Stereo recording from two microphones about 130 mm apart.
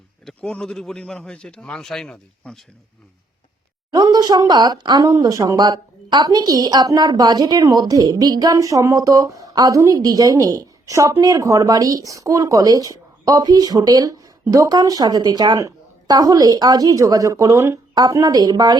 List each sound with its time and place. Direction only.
0.3 s a man's voice: 5° left (ahead or behind)
3.9 s speech: 30° right (ahead or behind)